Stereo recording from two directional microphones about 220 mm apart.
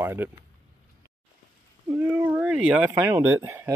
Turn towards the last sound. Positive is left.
turn(degrees=-10)  # may be behind; listen again after turning